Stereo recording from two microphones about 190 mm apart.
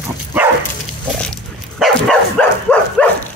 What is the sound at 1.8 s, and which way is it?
Dog, centre (ahead or behind).